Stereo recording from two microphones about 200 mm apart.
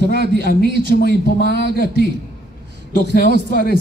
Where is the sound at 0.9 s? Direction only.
50° left (ahead or behind).